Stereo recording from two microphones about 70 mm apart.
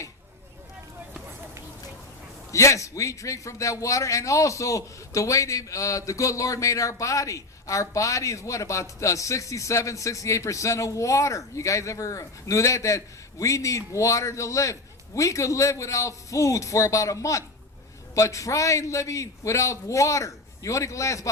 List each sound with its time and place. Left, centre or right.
2.5 s a man's voice: left